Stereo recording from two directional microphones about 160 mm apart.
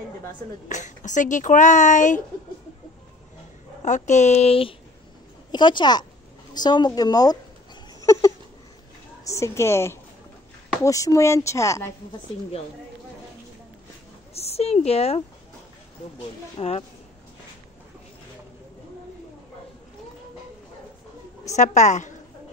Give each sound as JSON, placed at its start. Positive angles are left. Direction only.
{"t": 0.7, "sound": "speech", "side_deg": 50}
{"t": 3.8, "sound": "speech", "side_deg": 50}
{"t": 8.0, "sound": "a sound", "side_deg": 20}
{"t": 9.2, "sound": "a woman's voice", "side_deg": 20}
{"t": 14.3, "sound": "a woman's voice", "side_deg": 40}
{"t": 16.5, "sound": "speech", "side_deg": 40}
{"t": 21.5, "sound": "speech", "side_deg": 50}